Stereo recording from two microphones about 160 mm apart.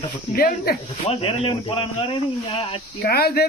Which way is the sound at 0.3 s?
70° left (ahead or behind).